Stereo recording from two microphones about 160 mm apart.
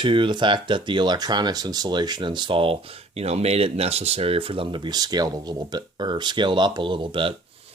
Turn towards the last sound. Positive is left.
turn(degrees=-30)  # may be behind; listen again after turning